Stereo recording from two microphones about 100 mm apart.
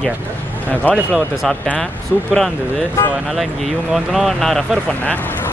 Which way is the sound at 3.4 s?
Centre (ahead or behind).